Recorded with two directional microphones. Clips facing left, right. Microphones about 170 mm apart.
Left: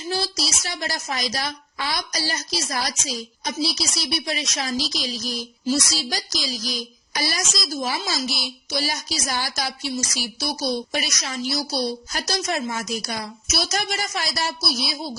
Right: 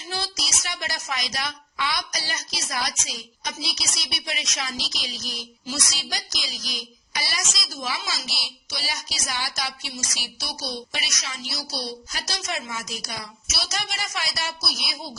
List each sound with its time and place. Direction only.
0.1 s a woman's voice: 35° left (ahead or behind)